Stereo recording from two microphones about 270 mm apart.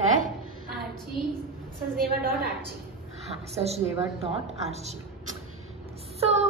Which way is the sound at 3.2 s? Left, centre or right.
Right.